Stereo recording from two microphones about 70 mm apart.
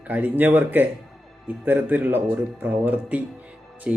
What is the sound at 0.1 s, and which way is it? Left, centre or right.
A man's voice, right.